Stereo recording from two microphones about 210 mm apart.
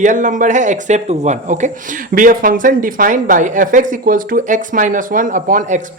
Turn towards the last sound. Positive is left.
turn(degrees=-40)  # may be behind; listen again after turning